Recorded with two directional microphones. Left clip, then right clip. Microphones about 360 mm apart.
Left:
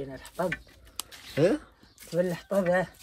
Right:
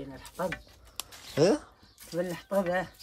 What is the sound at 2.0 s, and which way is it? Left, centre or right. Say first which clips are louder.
Speech: left 5 dB; centre.